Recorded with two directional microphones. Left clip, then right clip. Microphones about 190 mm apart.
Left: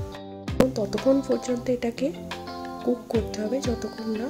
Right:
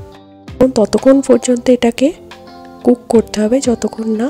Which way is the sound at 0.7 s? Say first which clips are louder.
Right 13 dB; 40° right (ahead or behind).